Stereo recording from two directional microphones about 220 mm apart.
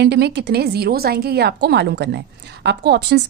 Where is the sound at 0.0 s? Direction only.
50° right (ahead or behind).